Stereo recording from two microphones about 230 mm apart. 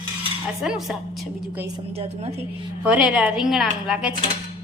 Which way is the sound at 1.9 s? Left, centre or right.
Right.